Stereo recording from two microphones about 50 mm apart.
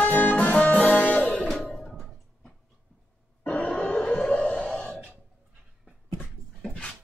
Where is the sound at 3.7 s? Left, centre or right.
Centre.